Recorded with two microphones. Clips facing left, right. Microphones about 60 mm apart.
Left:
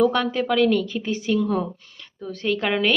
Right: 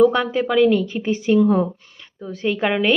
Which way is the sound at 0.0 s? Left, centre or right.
Centre.